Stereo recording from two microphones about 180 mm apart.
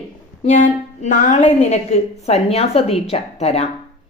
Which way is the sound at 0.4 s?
45° left (ahead or behind).